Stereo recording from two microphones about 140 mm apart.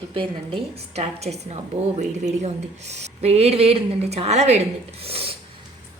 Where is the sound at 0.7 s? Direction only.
45° right (ahead or behind).